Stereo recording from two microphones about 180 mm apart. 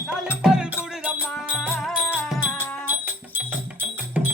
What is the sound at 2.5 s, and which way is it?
Music, 10° left (ahead or behind).